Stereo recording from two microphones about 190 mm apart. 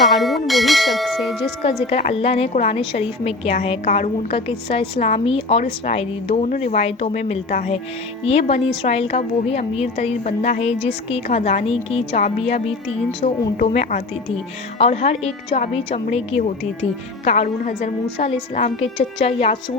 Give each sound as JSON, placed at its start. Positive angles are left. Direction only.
{"t": 0.1, "sound": "bell", "side_deg": 0}
{"t": 1.9, "sound": "a woman's voice", "side_deg": 35}